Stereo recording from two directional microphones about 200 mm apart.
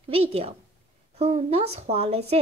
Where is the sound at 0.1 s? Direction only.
30° right (ahead or behind).